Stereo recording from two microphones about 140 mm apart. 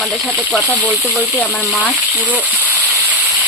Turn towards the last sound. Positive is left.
turn(degrees=-10)  # may be behind; listen again after turning